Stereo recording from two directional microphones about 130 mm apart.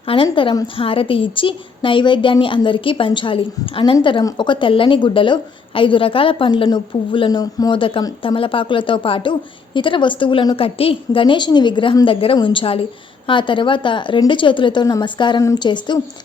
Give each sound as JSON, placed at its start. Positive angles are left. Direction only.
{"t": 0.0, "sound": "a woman's voice", "side_deg": 45}
{"t": 4.2, "sound": "a woman's voice", "side_deg": 30}